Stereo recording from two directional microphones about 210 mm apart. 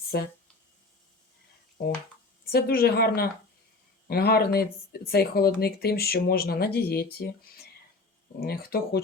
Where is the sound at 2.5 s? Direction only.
45° left (ahead or behind).